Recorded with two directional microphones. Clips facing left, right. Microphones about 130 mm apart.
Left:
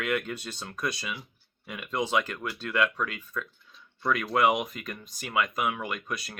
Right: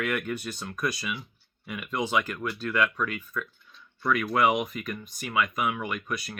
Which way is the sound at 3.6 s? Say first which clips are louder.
Right 1 dB; centre (ahead or behind).